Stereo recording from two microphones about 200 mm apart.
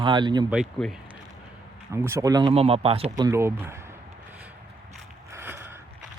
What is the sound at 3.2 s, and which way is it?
Speech, 15° right (ahead or behind).